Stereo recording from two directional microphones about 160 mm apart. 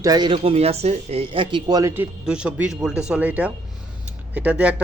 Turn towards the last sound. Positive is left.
turn(degrees=-10)  # may be behind; listen again after turning